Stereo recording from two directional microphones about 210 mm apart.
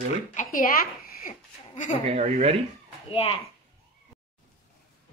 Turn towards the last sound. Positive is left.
turn(degrees=25)  # may be behind; listen again after turning